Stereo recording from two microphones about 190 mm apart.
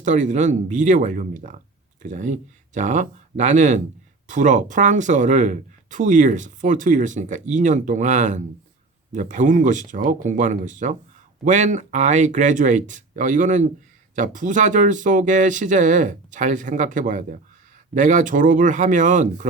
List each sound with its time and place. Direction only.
0.0 s speech: 40° right (ahead or behind)